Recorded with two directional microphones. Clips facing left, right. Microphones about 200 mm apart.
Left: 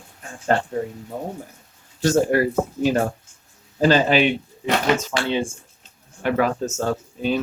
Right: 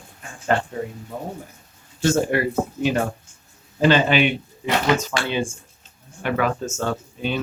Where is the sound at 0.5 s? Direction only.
40° left (ahead or behind).